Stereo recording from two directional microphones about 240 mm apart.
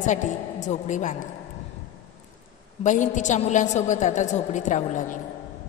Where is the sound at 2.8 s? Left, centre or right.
Left.